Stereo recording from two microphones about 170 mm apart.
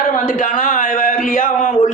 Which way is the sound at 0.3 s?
50° left (ahead or behind).